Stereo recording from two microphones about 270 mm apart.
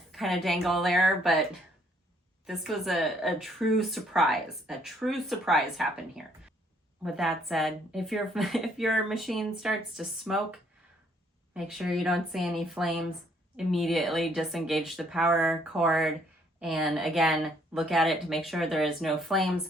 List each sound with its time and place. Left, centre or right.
0.1 s speech: centre
2.5 s speech: centre